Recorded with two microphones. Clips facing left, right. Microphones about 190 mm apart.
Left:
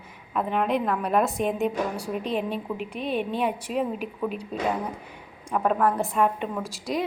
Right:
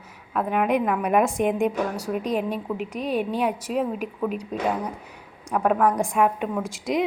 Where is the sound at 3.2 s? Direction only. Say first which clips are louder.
Right 2 dB; 10° right (ahead or behind).